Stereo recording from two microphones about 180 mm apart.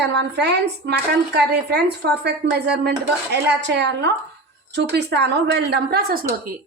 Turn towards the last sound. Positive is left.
turn(degrees=-65)  # may be behind; listen again after turning